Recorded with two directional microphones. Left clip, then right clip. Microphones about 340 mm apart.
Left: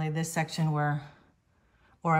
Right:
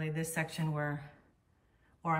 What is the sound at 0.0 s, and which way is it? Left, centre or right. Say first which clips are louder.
Speech: left 5 dB; centre.